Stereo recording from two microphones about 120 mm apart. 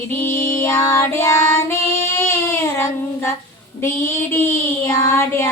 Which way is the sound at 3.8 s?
20° left (ahead or behind).